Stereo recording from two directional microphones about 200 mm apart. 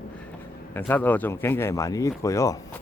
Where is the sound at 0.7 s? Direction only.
10° left (ahead or behind).